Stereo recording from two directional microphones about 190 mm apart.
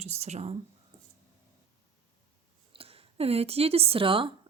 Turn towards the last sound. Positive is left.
turn(degrees=-30)  # may be behind; listen again after turning